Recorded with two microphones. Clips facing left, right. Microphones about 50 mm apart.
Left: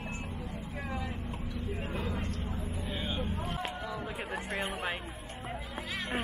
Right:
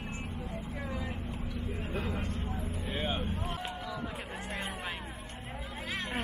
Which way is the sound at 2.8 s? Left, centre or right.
Right.